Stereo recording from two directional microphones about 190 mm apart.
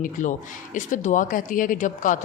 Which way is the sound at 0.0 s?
40° left (ahead or behind).